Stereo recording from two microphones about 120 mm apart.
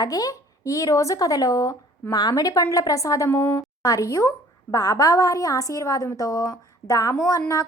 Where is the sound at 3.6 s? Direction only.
30° left (ahead or behind).